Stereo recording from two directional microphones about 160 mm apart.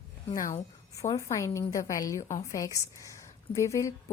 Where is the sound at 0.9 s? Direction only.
20° left (ahead or behind).